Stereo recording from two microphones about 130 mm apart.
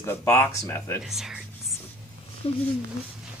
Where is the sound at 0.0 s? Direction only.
15° left (ahead or behind).